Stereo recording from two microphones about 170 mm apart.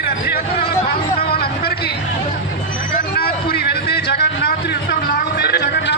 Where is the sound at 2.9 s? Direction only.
65° left (ahead or behind).